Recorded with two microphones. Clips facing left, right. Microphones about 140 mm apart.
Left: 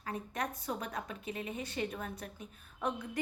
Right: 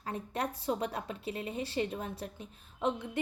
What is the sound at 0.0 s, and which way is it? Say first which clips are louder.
A woman's voice: right 2 dB; 30° right (ahead or behind).